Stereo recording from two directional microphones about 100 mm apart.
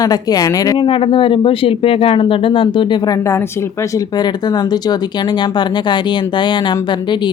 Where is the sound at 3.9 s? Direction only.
45° left (ahead or behind).